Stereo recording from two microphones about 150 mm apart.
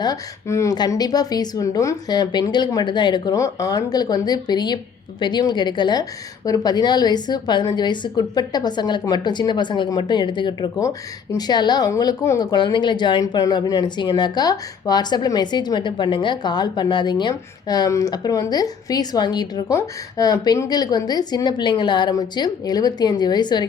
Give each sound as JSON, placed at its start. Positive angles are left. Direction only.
{"t": 0.0, "sound": "a woman's voice", "side_deg": 20}